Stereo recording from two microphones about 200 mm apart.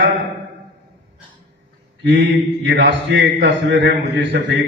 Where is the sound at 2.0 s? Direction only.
60° right (ahead or behind).